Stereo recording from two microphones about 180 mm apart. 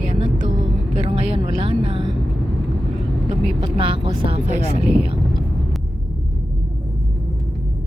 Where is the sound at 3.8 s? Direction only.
30° right (ahead or behind).